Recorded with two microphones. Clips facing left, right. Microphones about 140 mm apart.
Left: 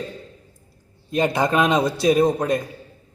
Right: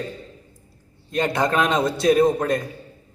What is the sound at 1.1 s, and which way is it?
A man's voice, 5° left (ahead or behind).